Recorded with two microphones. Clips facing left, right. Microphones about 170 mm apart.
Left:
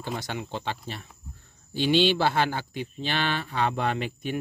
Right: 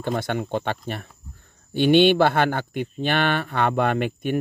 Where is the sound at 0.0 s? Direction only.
55° right (ahead or behind).